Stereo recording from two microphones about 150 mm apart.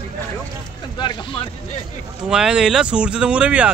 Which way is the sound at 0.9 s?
30° left (ahead or behind).